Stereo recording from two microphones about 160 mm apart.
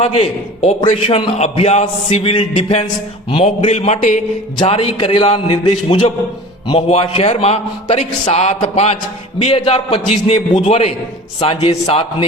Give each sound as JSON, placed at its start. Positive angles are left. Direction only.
{"t": 0.0, "sound": "a man's voice", "side_deg": 40}
{"t": 4.6, "sound": "a man's voice", "side_deg": 35}